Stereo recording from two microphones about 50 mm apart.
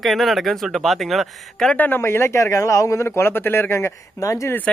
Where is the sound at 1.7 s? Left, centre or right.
Left.